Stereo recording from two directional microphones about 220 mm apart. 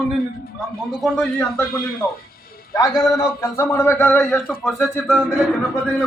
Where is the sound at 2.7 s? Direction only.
15° left (ahead or behind); by 5.4 s centre (ahead or behind).